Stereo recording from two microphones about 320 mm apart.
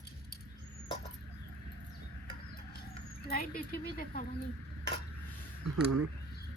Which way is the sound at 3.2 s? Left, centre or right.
Left.